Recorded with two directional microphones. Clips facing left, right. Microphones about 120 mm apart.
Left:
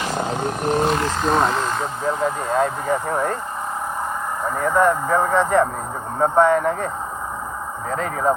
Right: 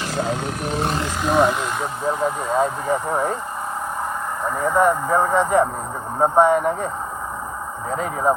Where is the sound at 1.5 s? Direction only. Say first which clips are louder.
Left 2 dB; 15° right (ahead or behind).